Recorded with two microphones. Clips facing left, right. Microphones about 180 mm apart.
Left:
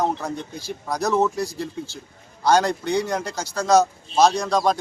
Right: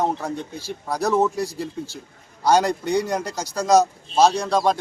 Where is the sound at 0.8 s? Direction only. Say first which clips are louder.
Right 1 dB; 10° right (ahead or behind).